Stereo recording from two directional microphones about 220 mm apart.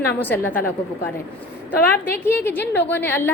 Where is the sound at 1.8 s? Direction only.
10° left (ahead or behind).